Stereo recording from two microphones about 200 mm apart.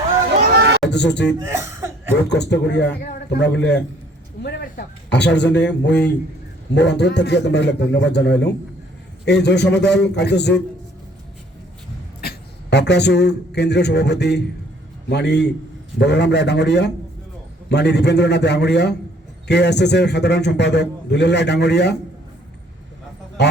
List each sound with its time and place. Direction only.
0.5 s a sound: 60° right (ahead or behind)
0.9 s a man's voice: 60° left (ahead or behind)
1.5 s cough: 15° right (ahead or behind)
2.3 s a man's voice: 60° left (ahead or behind)
12.2 s a man's voice: 55° left (ahead or behind)